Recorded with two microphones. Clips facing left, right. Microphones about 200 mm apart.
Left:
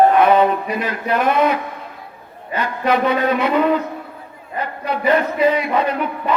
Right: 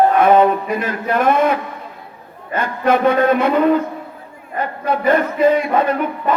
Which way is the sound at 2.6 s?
50° right (ahead or behind).